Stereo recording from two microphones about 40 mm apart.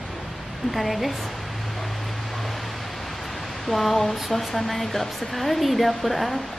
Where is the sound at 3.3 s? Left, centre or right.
Centre.